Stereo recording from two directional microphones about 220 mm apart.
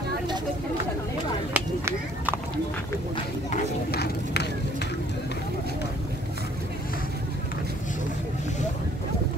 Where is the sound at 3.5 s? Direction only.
45° left (ahead or behind).